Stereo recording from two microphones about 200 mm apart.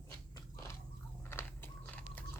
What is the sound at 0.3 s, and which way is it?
Biting, 15° left (ahead or behind).